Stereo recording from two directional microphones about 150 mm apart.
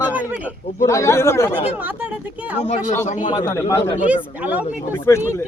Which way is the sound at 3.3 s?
25° left (ahead or behind).